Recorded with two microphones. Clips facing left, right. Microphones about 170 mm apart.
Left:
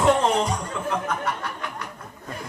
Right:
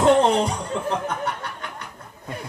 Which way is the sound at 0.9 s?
35° right (ahead or behind).